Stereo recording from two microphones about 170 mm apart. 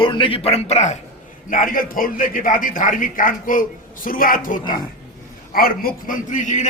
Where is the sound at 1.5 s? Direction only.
55° left (ahead or behind).